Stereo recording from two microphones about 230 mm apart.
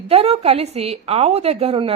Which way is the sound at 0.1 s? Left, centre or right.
Right.